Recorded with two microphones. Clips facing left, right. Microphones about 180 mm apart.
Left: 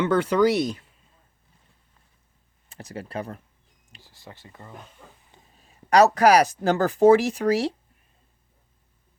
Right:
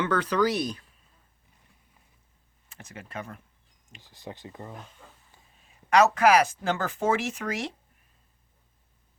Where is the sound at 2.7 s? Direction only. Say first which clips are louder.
Left 7 dB; 35° left (ahead or behind).